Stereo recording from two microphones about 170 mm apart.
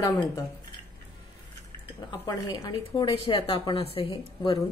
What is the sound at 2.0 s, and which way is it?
A woman's voice, 25° left (ahead or behind).